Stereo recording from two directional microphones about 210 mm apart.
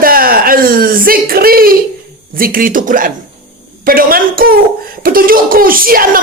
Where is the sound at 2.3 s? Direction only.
45° right (ahead or behind).